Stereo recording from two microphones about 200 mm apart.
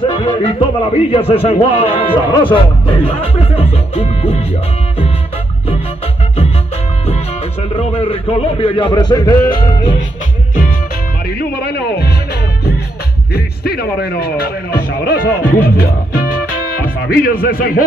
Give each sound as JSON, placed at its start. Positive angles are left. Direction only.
{"t": 0.0, "sound": "a man's voice", "side_deg": 25}
{"t": 7.7, "sound": "a man's voice", "side_deg": 30}
{"t": 11.2, "sound": "music", "side_deg": 50}
{"t": 13.3, "sound": "a man's voice", "side_deg": 50}